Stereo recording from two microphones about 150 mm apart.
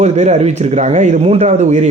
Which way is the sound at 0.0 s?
50° right (ahead or behind).